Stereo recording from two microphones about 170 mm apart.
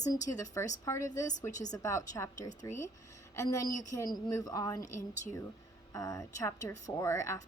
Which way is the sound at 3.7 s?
45° left (ahead or behind).